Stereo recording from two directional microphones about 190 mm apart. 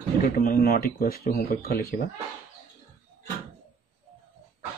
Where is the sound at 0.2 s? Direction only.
50° left (ahead or behind).